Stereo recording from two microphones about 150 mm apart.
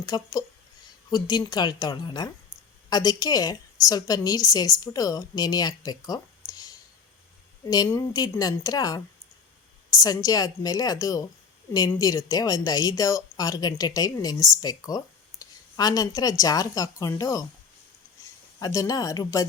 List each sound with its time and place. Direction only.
0.0 s speech: 25° left (ahead or behind)
18.6 s speech: 20° left (ahead or behind)